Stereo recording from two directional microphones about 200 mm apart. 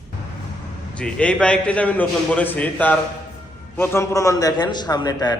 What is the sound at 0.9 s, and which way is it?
A man's voice, 5° left (ahead or behind).